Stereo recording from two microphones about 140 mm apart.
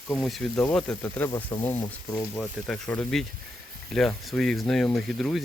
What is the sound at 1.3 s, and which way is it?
Speech, 30° left (ahead or behind).